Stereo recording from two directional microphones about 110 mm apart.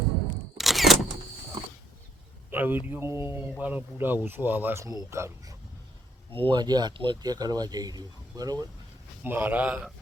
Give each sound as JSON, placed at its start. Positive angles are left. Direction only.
{"t": 0.5, "sound": "camera", "side_deg": 0}
{"t": 2.5, "sound": "a man's voice", "side_deg": -15}
{"t": 6.3, "sound": "speech", "side_deg": -55}
{"t": 6.6, "sound": "speech", "side_deg": -40}
{"t": 9.2, "sound": "speech", "side_deg": -20}